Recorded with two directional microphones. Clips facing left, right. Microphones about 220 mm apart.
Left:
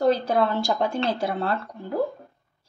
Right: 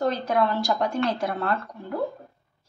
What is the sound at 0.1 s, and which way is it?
A woman's voice, 30° left (ahead or behind).